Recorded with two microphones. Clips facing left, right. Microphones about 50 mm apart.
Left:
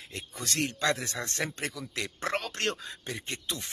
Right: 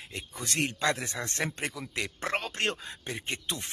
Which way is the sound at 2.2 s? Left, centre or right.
Centre.